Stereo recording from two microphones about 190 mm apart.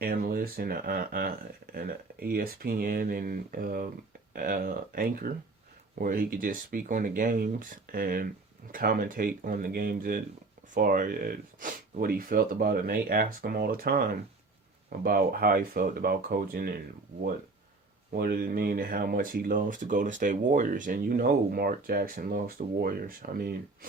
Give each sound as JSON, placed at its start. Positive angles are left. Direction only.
{"t": 0.0, "sound": "speech", "side_deg": -50}
{"t": 15.0, "sound": "speech", "side_deg": -50}
{"t": 18.1, "sound": "speech", "side_deg": -50}